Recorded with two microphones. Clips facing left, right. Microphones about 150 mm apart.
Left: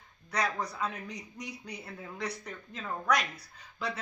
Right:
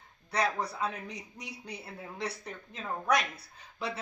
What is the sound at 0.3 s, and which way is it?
A woman's voice, 30° right (ahead or behind).